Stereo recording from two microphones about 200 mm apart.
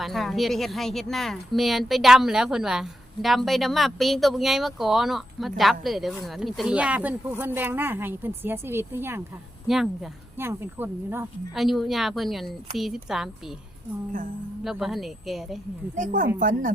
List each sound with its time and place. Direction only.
0.0 s speech: centre (ahead or behind)
10.3 s speech: 10° right (ahead or behind)
14.6 s speech: centre (ahead or behind)
16.0 s a woman's voice: 40° right (ahead or behind)